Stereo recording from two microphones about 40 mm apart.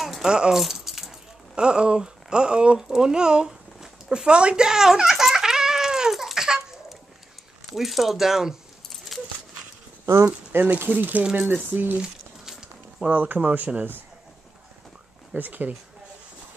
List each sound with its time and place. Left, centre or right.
0.0 s rattle: centre
0.3 s speech: right
0.6 s keys jangling: centre
1.5 s speech: right
4.1 s giggle: right
6.3 s a sound: centre
7.7 s speech: centre
9.1 s dog: centre
10.0 s speech: right
10.9 s speech: right
11.6 s speech: right
12.0 s a sound: centre
13.1 s speech: right
15.3 s speech: right